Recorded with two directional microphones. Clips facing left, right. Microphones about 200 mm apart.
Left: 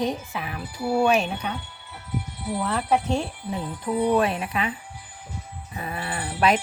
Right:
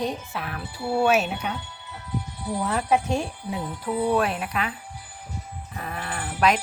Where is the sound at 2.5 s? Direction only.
10° right (ahead or behind).